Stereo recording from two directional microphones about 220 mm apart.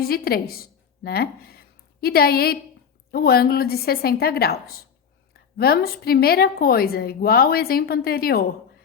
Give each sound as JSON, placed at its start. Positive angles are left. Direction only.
{"t": 0.1, "sound": "a woman's voice", "side_deg": 45}